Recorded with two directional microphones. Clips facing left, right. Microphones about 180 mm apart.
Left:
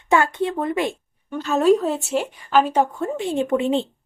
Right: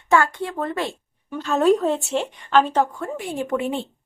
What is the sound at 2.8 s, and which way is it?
A woman's voice, 25° left (ahead or behind).